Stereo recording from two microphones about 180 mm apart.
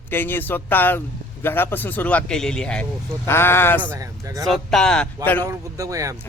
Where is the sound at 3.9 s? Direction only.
20° right (ahead or behind).